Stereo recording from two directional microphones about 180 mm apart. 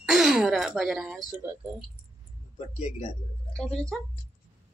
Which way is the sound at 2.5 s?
40° left (ahead or behind).